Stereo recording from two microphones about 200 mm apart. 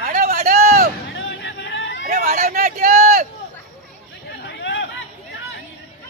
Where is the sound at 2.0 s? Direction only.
40° right (ahead or behind).